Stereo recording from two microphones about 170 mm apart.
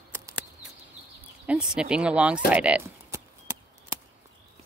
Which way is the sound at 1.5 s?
5° right (ahead or behind).